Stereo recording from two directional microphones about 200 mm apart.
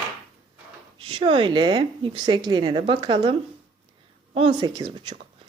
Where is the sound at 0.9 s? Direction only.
25° right (ahead or behind).